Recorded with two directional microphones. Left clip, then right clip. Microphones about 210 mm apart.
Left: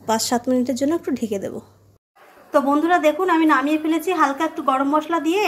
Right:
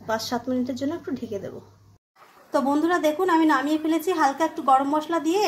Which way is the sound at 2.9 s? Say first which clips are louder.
Left 4 dB; 10° left (ahead or behind).